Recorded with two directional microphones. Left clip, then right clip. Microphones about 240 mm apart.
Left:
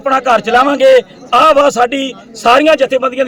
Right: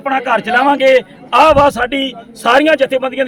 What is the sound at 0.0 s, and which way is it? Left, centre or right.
A man's voice, centre.